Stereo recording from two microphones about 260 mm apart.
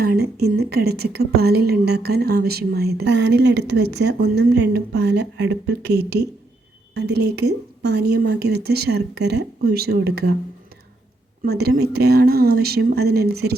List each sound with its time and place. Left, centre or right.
0.0 s a woman's voice: right
11.4 s a woman's voice: right